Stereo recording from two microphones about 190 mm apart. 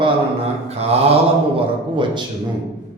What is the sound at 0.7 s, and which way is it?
Mantra, 35° right (ahead or behind).